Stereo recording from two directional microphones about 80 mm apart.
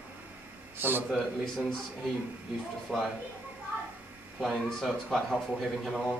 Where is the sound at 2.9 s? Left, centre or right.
Centre.